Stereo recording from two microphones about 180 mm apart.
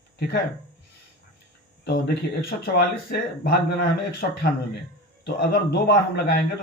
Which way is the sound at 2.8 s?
65° left (ahead or behind).